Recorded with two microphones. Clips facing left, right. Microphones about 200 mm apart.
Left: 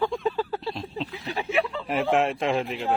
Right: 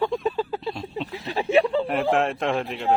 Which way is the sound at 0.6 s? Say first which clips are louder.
Right 2 dB; centre (ahead or behind).